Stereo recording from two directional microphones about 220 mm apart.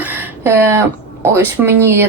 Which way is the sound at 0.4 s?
10° right (ahead or behind).